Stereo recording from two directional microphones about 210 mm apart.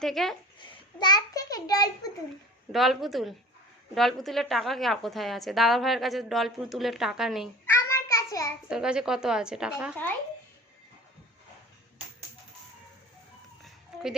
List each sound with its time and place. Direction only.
0.0 s a woman's voice: centre (ahead or behind)
0.6 s a sound: 20° left (ahead or behind)
2.7 s a woman's voice: centre (ahead or behind)
7.6 s child singing: 10° left (ahead or behind)
8.7 s a woman's voice: 5° right (ahead or behind)